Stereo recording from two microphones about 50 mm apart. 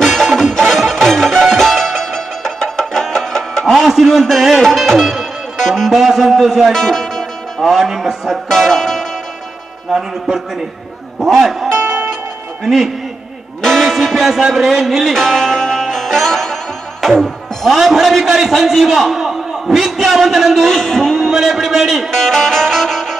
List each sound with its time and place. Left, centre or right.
0.0 s music: centre
3.6 s music: centre
5.9 s a sound: centre
6.7 s speech: centre
8.5 s speech: centre
9.8 s a man's voice: centre
11.8 s music: right
12.6 s a man's voice: centre
15.1 s music: centre
17.7 s a man's voice: centre
21.3 s a man's voice: centre
22.1 s music: centre